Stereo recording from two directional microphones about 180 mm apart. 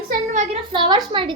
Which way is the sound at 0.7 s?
25° right (ahead or behind).